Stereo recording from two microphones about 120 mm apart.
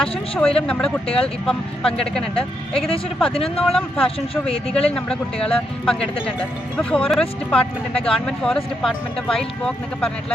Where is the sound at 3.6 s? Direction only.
5° left (ahead or behind).